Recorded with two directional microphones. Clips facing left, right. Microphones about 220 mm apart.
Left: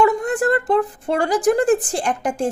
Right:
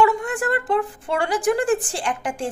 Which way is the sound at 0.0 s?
40° left (ahead or behind).